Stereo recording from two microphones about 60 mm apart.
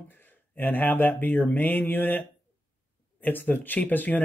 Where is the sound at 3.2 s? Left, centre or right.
Left.